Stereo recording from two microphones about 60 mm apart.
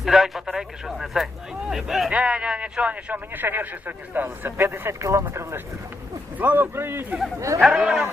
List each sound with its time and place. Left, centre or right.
0.0 s speech: centre
2.0 s speech: centre; by 4.9 s right
4.9 s speech: right
6.4 s speech: right
7.3 s speech: right
7.6 s speech: centre